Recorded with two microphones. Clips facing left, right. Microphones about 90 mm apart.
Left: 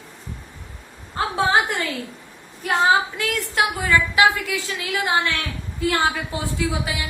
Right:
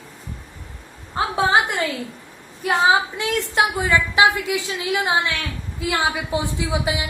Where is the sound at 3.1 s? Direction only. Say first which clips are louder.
Right 2 dB; 20° right (ahead or behind).